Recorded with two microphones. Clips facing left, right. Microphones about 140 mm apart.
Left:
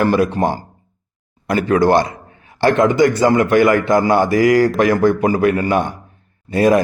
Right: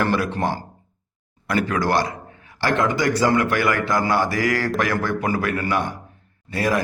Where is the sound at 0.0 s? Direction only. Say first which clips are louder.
Left 6 dB; 15° left (ahead or behind).